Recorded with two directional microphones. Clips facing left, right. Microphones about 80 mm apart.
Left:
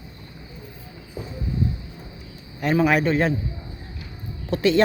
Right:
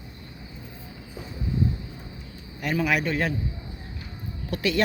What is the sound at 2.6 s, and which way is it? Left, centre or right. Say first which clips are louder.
Speech: left 6 dB; left.